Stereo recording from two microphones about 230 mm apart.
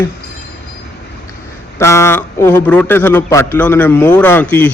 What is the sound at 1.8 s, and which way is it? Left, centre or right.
A man's voice, centre.